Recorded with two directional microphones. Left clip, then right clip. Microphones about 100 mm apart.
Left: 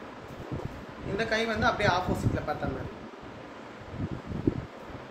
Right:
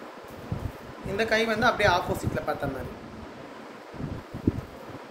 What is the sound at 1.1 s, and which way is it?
Speech, 55° right (ahead or behind).